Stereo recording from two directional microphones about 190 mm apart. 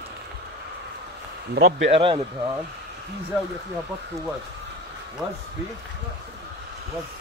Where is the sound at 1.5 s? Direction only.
75° right (ahead or behind).